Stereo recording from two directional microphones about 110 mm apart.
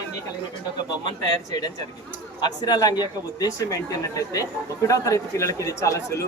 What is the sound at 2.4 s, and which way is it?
A man's voice, 35° left (ahead or behind).